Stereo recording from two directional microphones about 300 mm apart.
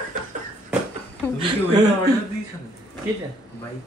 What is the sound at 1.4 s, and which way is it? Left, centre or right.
Speech, centre.